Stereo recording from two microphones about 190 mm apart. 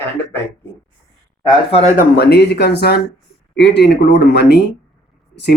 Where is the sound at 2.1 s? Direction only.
60° left (ahead or behind).